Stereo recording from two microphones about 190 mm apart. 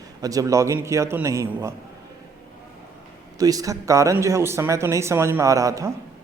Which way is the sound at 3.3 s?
20° right (ahead or behind).